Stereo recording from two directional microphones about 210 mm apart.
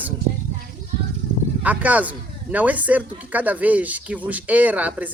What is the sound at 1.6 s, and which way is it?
A woman's voice, 5° right (ahead or behind).